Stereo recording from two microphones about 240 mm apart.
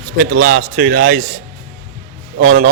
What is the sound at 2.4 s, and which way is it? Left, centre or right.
Speech, right.